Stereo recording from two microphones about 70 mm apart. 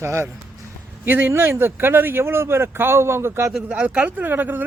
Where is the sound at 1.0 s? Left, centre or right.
Right.